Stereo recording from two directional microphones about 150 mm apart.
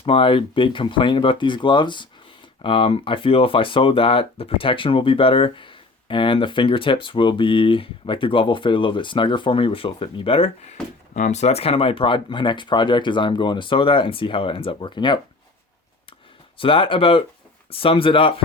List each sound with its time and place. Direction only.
0.0 s speech: 35° left (ahead or behind)
11.1 s speech: 50° left (ahead or behind); by 15.2 s 30° left (ahead or behind)
16.6 s speech: 35° left (ahead or behind)